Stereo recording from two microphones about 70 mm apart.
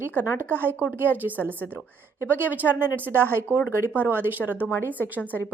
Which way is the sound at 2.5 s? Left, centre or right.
Right.